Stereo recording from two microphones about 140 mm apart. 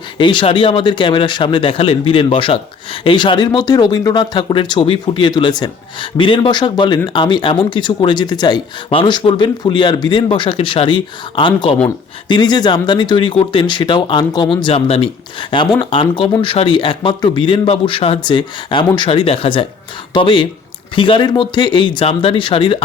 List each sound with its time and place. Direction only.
0.2 s speech: 35° left (ahead or behind)